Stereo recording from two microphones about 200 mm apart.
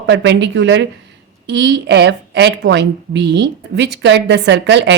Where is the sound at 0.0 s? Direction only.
60° right (ahead or behind).